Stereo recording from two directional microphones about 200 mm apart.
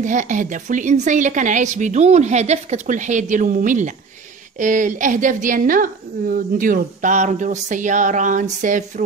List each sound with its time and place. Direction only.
0.0 s a woman's voice: 40° right (ahead or behind)